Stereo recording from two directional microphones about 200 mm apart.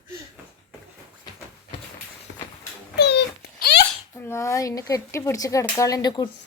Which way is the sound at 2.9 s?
55° left (ahead or behind).